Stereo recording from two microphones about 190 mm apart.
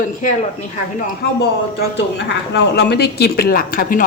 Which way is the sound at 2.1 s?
65° left (ahead or behind).